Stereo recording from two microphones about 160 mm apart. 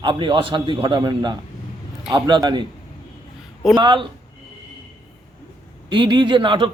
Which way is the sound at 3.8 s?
30° right (ahead or behind).